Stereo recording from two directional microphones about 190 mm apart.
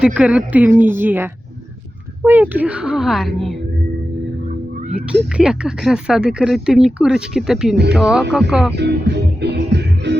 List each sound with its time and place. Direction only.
0.0 s speech: 5° right (ahead or behind)
4.9 s speech: 5° right (ahead or behind)
8.7 s music: 65° right (ahead or behind)